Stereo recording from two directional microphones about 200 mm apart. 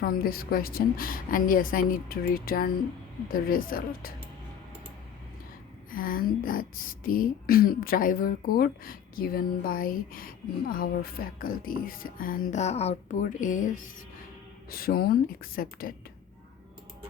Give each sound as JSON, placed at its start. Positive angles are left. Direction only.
{"t": 0.0, "sound": "speech", "side_deg": 45}
{"t": 5.9, "sound": "speech", "side_deg": 45}